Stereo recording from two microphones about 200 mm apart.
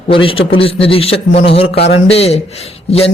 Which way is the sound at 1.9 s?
30° left (ahead or behind).